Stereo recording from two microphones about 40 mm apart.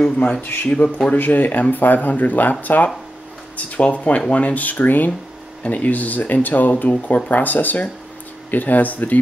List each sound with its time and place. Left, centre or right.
0.4 s speech: left
0.8 s speech: left
1.1 s speech: left